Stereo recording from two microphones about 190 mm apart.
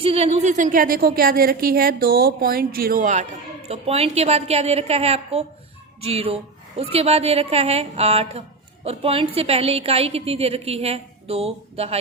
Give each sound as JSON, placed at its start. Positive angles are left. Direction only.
{"t": 0.0, "sound": "a woman's voice", "side_deg": -30}